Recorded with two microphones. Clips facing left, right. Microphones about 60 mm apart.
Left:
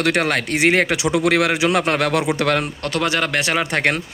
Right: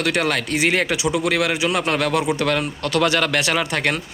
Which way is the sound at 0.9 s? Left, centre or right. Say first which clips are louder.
Left 3 dB; left.